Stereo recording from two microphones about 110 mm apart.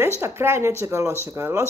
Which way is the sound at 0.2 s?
20° right (ahead or behind).